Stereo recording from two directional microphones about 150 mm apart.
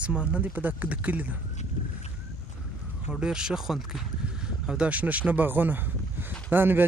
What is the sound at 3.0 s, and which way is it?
Speech, 5° right (ahead or behind).